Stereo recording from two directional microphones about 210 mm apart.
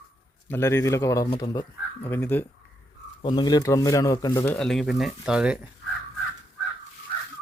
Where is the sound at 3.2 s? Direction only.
20° left (ahead or behind).